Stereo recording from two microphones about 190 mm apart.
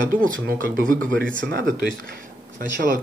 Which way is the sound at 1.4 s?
70° right (ahead or behind).